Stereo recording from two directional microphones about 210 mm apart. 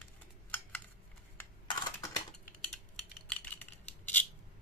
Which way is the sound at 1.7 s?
20° left (ahead or behind).